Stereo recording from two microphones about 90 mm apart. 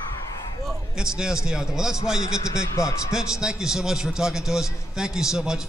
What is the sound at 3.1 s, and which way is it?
A man's voice, 5° right (ahead or behind).